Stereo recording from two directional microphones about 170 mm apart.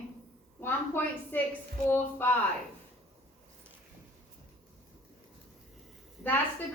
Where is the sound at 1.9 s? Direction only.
10° left (ahead or behind).